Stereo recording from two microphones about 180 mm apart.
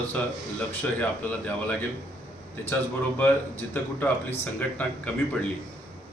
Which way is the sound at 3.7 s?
10° left (ahead or behind).